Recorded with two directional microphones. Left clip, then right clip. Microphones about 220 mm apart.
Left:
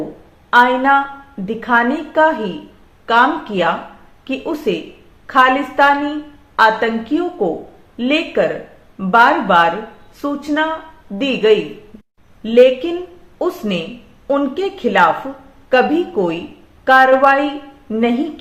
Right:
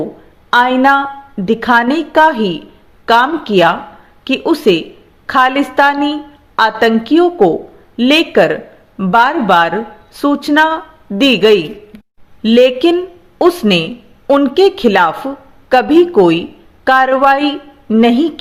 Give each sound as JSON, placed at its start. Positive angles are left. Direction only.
{"t": 0.5, "sound": "speech", "side_deg": -50}